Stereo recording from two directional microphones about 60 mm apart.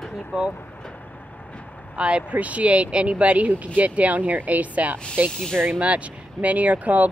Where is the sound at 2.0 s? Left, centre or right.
Centre.